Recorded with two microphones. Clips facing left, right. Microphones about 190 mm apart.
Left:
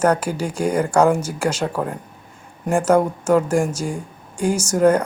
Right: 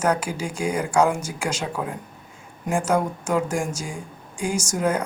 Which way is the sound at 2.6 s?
60° left (ahead or behind).